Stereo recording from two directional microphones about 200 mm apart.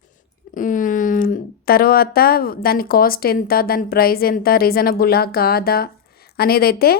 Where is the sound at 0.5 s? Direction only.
40° left (ahead or behind).